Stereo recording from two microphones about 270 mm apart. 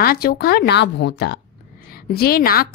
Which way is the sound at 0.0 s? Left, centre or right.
Left.